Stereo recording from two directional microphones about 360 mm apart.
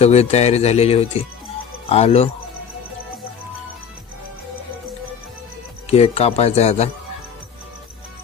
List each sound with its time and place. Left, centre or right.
0.0 s speech: centre
5.9 s speech: centre